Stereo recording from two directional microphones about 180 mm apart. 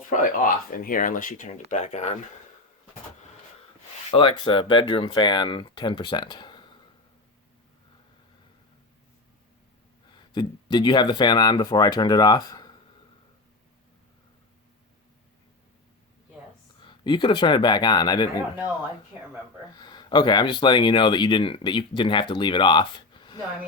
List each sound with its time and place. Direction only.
0.1 s speech: 45° left (ahead or behind)
4.1 s speech: 30° left (ahead or behind)
10.2 s speech: 25° left (ahead or behind)
16.8 s speech: 25° left (ahead or behind)
19.7 s speech: 25° left (ahead or behind)